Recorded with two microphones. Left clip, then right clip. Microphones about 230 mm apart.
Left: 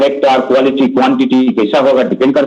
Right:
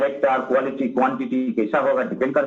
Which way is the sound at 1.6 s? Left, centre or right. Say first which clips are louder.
Left 9 dB; left.